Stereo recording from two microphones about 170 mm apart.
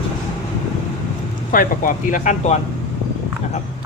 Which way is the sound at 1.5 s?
55° left (ahead or behind).